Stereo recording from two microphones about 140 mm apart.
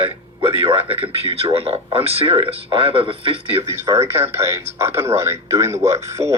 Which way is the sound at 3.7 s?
20° right (ahead or behind).